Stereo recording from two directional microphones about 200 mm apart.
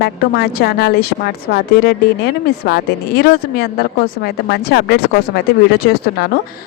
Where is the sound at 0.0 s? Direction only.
55° left (ahead or behind).